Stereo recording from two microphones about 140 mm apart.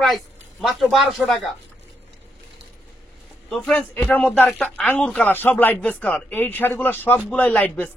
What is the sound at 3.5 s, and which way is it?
Speech, 5° left (ahead or behind).